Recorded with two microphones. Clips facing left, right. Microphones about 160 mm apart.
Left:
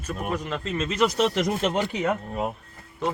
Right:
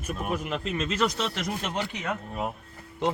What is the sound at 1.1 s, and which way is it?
Speech, 45° left (ahead or behind).